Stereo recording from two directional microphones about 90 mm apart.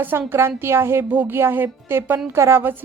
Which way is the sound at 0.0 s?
25° right (ahead or behind).